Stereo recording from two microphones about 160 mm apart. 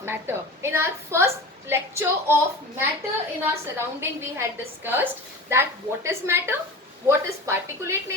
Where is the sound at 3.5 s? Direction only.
15° right (ahead or behind).